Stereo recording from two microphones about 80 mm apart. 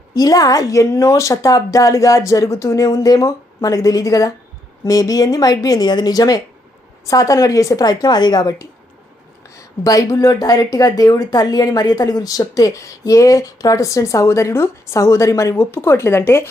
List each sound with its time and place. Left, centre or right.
0.2 s speech: left
5.9 s a woman's voice: left